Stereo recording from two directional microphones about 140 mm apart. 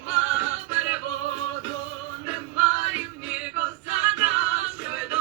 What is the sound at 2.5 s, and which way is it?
Music, 10° right (ahead or behind).